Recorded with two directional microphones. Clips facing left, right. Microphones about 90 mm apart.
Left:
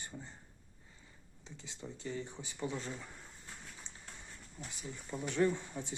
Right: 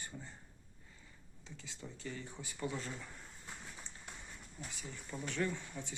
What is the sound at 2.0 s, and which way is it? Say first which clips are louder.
Speech: left 5 dB; 20° left (ahead or behind).